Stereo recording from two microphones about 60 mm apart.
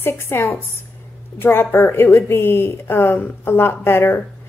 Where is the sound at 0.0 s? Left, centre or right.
Left.